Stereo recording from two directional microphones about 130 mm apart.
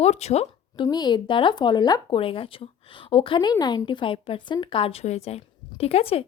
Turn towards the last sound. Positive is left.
turn(degrees=50)  # may be behind; listen again after turning